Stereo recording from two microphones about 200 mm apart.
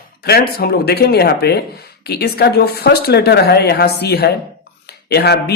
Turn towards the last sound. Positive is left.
turn(degrees=55)  # may be behind; listen again after turning